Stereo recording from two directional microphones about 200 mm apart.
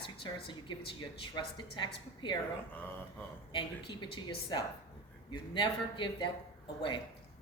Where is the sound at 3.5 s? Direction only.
25° left (ahead or behind).